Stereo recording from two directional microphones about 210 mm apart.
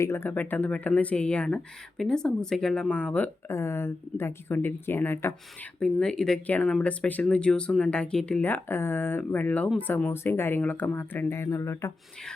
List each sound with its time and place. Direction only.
0.0 s speech: 10° left (ahead or behind)